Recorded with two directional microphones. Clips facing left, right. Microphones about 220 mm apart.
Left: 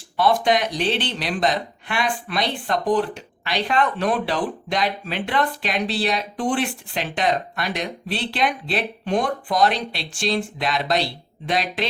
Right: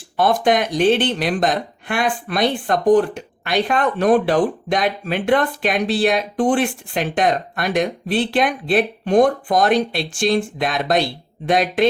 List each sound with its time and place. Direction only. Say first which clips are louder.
0.2 s speech: right 2 dB; 50° right (ahead or behind)